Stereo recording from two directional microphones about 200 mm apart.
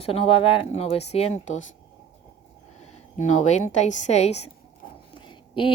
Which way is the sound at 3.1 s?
35° left (ahead or behind).